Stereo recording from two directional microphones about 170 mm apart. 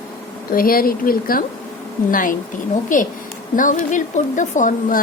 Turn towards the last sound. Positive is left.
turn(degrees=50)  # may be behind; listen again after turning